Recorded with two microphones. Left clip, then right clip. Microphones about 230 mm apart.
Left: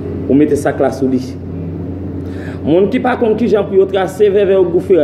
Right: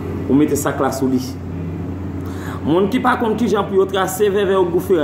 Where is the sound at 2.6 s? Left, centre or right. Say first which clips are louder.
Left 4 dB; centre.